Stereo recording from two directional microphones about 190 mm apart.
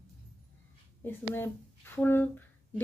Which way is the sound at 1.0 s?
10° left (ahead or behind).